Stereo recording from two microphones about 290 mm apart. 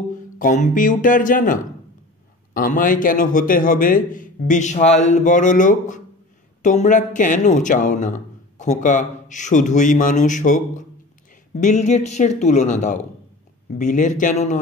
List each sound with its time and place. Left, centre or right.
0.4 s a man's voice: left